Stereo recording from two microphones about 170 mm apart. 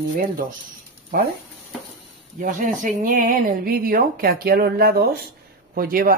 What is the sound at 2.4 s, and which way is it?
Speech, 50° right (ahead or behind).